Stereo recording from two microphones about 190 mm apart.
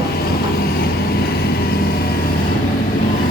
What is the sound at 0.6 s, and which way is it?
Vehicle, 55° left (ahead or behind).